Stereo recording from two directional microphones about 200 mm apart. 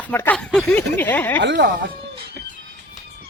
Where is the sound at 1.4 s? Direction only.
60° right (ahead or behind).